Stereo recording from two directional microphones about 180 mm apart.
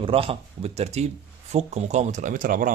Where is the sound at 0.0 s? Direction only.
30° right (ahead or behind).